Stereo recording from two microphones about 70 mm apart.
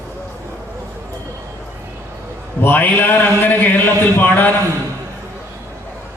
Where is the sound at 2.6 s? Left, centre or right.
Left.